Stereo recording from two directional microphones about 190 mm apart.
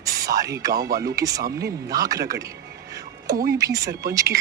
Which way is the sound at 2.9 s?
15° right (ahead or behind).